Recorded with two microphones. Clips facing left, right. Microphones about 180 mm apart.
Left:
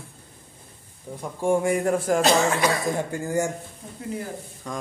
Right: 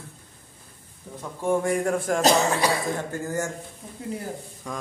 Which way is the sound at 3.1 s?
15° left (ahead or behind).